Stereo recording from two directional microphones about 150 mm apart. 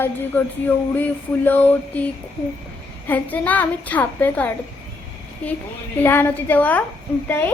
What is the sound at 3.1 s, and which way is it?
A woman's voice, 10° left (ahead or behind).